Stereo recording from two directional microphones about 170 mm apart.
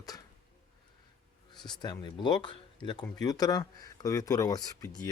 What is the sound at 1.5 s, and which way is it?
Speech, 25° left (ahead or behind).